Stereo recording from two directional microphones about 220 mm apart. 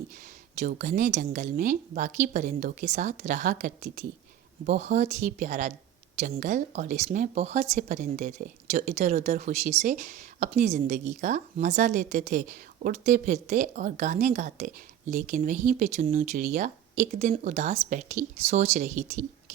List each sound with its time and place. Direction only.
0.6 s speech: 35° right (ahead or behind)